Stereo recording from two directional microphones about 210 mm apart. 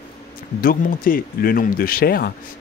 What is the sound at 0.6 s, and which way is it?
Speech, 45° left (ahead or behind).